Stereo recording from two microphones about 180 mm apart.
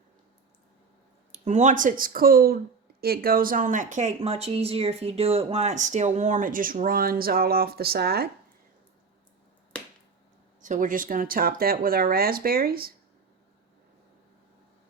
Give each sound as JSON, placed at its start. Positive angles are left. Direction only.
{"t": 1.3, "sound": "speech", "side_deg": -40}
{"t": 10.6, "sound": "speech", "side_deg": -45}